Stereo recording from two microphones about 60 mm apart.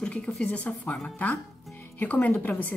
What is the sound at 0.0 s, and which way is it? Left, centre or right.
Speech, centre.